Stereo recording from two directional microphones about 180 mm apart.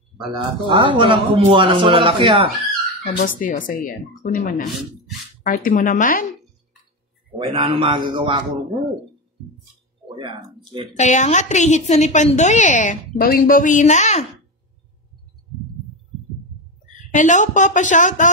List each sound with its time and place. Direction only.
0.3 s a man's voice: 25° right (ahead or behind)
3.0 s speech: 50° left (ahead or behind)
7.3 s a man's voice: 30° right (ahead or behind)
10.0 s speech: 25° right (ahead or behind)
11.0 s a woman's voice: 40° left (ahead or behind)
17.1 s speech: 45° left (ahead or behind)